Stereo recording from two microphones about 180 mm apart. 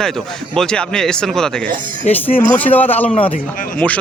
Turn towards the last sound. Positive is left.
turn(degrees=5)  # may be behind; listen again after turning